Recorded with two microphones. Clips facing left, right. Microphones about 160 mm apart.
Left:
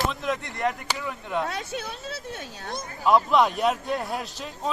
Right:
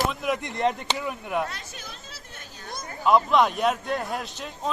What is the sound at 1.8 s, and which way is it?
Speech, 75° left (ahead or behind).